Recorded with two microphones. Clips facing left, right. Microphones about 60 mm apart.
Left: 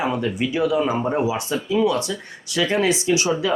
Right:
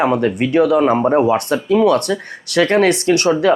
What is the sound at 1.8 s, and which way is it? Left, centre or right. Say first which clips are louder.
Speech: right 7 dB; right.